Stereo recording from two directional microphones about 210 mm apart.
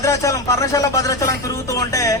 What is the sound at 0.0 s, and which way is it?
Speech, 15° left (ahead or behind).